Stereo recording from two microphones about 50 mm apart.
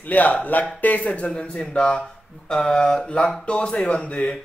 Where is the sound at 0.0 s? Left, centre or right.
Left.